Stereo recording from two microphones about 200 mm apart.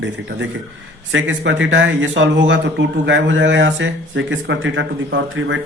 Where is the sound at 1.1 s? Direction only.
65° right (ahead or behind).